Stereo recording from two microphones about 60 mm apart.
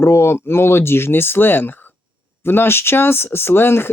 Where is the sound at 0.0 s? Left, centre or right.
Left.